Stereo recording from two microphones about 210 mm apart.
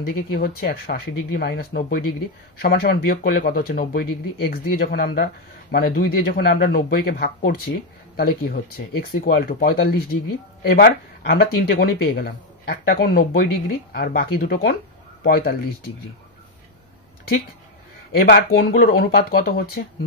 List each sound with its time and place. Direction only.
0.0 s speech: 45° left (ahead or behind)
18.1 s speech: 45° left (ahead or behind)